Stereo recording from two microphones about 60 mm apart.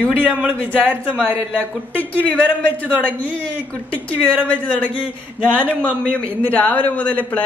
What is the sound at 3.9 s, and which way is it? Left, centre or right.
Speech, left.